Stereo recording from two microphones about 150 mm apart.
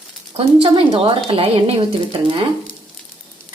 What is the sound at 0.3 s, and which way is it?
Speech, 40° right (ahead or behind).